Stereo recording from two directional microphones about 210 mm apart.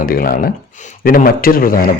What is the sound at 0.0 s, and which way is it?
Speech, 45° left (ahead or behind).